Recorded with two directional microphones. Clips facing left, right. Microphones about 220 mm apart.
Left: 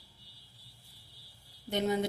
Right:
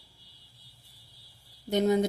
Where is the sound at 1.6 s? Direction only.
45° right (ahead or behind).